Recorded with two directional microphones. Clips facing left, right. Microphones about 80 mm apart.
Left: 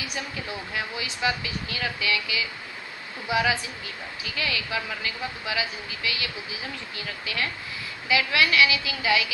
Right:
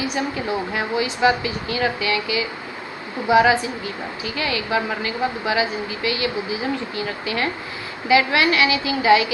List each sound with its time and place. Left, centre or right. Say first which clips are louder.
0.0 s a woman's voice: right 10 dB; right